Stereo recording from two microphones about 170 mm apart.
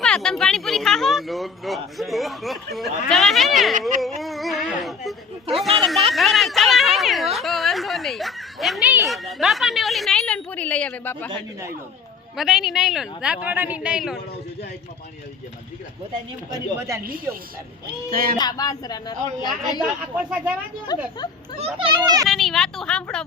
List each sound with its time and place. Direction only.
0.0 s speech: 5° left (ahead or behind)
4.2 s a sound: centre (ahead or behind)
5.5 s speech: centre (ahead or behind)
6.1 s a sound: centre (ahead or behind)
9.0 s speech: centre (ahead or behind)
12.4 s speech: centre (ahead or behind)
16.5 s speech: 20° right (ahead or behind)
18.1 s speech: 60° right (ahead or behind)
18.3 s a woman's voice: 25° left (ahead or behind)
19.8 s speech: 5° right (ahead or behind)
20.9 s a woman's voice: 25° left (ahead or behind)
21.6 s a child's voice: 30° right (ahead or behind)
22.3 s speech: centre (ahead or behind)